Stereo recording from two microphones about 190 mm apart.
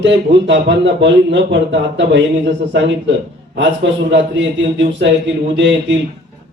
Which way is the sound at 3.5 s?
70° right (ahead or behind).